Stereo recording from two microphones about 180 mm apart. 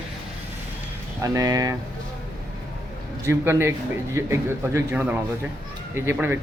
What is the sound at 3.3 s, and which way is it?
A man's voice, 15° right (ahead or behind).